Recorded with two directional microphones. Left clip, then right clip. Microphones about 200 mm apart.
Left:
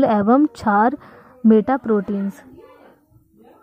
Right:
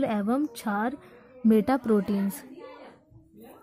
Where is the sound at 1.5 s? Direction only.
Centre (ahead or behind).